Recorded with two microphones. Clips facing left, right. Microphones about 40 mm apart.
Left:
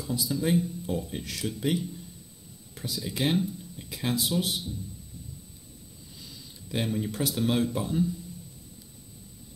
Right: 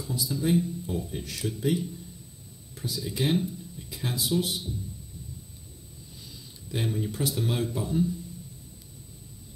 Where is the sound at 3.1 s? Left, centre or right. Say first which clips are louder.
Even; left.